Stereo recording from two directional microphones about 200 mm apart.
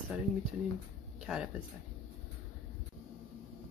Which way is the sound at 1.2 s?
5° right (ahead or behind).